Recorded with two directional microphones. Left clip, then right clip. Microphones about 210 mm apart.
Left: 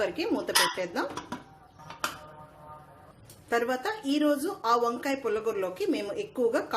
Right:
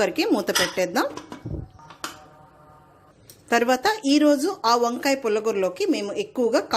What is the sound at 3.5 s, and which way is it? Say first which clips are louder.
Speech: right 8 dB; 40° right (ahead or behind).